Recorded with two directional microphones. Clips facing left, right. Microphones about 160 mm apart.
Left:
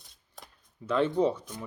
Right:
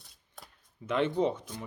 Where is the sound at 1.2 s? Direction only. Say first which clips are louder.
Left 2 dB; 20° right (ahead or behind).